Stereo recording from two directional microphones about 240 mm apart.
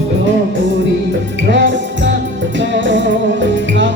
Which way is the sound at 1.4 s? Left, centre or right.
Right.